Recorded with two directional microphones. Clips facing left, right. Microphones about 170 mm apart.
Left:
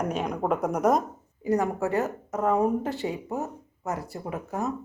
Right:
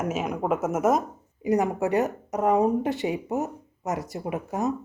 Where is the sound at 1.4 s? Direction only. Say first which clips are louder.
Right 2 dB; 15° right (ahead or behind).